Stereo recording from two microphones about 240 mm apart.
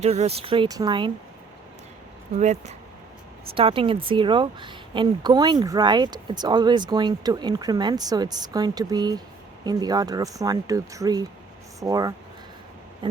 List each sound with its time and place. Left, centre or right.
0.0 s speech: right
2.3 s speech: right; by 12.1 s centre